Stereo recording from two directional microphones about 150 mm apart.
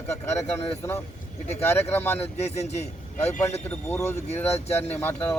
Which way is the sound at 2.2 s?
45° left (ahead or behind).